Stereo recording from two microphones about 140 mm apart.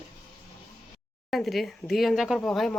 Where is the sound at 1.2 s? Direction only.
Centre (ahead or behind).